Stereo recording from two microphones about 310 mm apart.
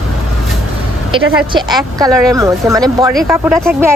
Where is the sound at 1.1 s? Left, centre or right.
Centre.